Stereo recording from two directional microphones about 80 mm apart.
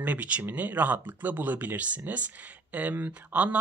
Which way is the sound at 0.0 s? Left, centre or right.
Centre.